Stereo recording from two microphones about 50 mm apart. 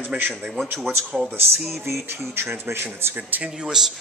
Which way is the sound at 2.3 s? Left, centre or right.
Right.